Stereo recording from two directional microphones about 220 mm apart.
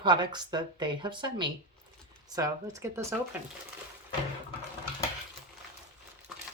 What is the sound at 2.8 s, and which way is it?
Speech, 10° right (ahead or behind).